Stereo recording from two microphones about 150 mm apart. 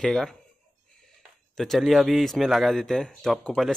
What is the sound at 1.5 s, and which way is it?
A man's voice, centre (ahead or behind).